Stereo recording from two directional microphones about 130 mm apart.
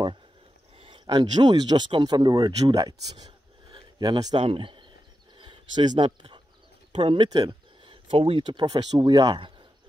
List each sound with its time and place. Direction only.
0.7 s speech: 40° right (ahead or behind)
5.4 s a sound: 35° right (ahead or behind)
6.9 s speech: 40° right (ahead or behind)